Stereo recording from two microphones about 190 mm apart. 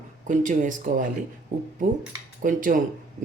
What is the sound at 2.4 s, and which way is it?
Speech, 45° right (ahead or behind).